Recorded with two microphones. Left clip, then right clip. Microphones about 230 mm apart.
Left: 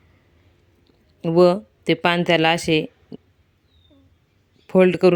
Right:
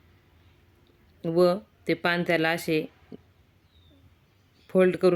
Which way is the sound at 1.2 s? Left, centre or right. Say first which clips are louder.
Left 7 dB; left.